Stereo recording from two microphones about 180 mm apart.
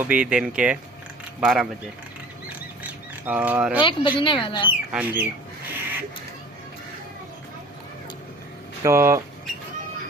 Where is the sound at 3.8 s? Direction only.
30° left (ahead or behind).